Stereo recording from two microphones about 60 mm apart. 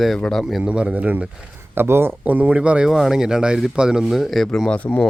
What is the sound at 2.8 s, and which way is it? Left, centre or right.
Speech, centre.